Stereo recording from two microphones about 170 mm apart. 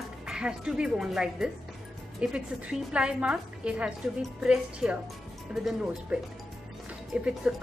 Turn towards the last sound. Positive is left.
turn(degrees=-5)  # may be behind; listen again after turning